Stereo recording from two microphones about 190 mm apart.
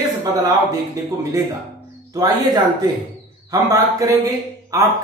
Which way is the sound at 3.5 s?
20° right (ahead or behind).